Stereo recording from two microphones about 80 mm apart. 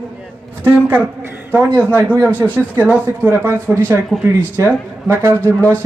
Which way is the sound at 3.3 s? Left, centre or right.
Right.